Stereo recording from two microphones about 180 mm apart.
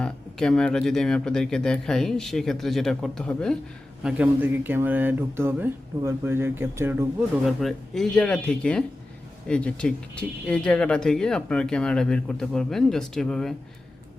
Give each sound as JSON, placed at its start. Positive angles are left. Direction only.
{"t": 0.0, "sound": "speech", "side_deg": 5}
{"t": 4.0, "sound": "speech", "side_deg": -10}
{"t": 7.4, "sound": "speech", "side_deg": 0}